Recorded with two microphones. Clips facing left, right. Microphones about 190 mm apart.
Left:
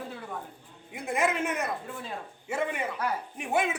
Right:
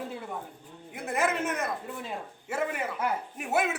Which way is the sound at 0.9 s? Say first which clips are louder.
Left 1 dB; centre (ahead or behind).